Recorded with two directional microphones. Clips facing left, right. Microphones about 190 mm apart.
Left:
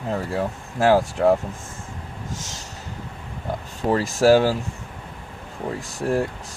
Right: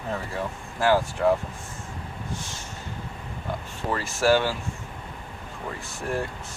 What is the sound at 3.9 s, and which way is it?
Speech, 40° left (ahead or behind).